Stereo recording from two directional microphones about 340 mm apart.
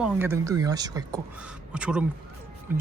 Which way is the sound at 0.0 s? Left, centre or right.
Centre.